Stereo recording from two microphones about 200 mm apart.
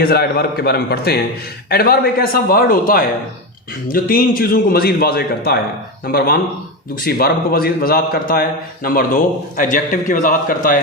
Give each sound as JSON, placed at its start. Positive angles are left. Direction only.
{"t": 0.0, "sound": "speech", "side_deg": 50}